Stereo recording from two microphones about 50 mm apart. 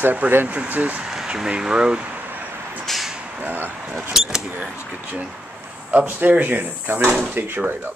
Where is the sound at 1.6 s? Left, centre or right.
Centre.